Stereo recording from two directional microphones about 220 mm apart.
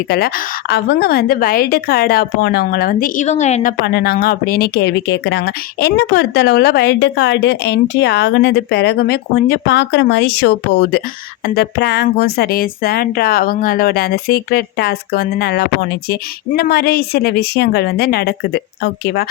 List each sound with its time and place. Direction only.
0.1 s a woman's voice: 45° left (ahead or behind)